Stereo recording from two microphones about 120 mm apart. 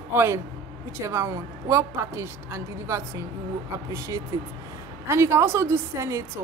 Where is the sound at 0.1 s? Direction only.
20° right (ahead or behind).